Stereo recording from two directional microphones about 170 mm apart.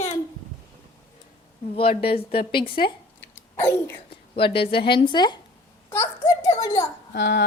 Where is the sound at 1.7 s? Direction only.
35° left (ahead or behind).